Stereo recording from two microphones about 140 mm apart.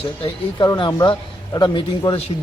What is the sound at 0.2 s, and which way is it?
Speech, 40° left (ahead or behind).